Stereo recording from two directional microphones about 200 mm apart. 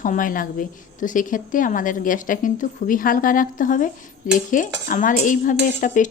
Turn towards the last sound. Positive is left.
turn(degrees=40)  # may be behind; listen again after turning